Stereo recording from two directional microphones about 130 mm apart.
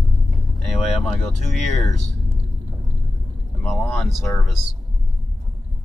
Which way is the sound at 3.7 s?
Centre (ahead or behind).